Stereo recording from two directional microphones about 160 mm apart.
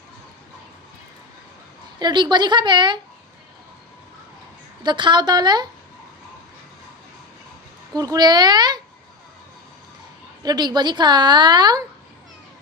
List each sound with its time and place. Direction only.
2.0 s a woman's voice: 25° right (ahead or behind)
4.8 s a woman's voice: 30° right (ahead or behind)
7.9 s speech: 25° right (ahead or behind)
10.4 s a woman's voice: 25° right (ahead or behind)